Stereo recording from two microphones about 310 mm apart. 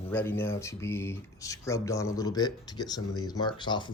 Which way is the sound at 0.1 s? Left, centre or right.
Centre.